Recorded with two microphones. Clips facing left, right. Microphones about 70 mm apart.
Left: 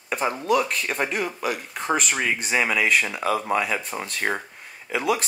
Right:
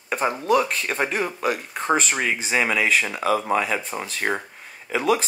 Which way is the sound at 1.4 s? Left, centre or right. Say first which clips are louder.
Right 3 dB; right.